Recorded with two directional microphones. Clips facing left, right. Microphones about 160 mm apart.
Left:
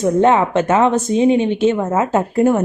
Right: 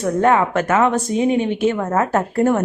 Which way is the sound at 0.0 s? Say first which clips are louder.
Left 3 dB; 20° left (ahead or behind).